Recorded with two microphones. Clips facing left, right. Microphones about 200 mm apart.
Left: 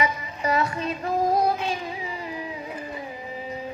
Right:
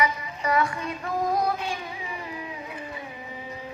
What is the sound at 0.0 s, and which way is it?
Child singing, 25° left (ahead or behind).